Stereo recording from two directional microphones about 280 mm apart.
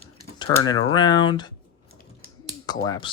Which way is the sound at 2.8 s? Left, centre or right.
Centre.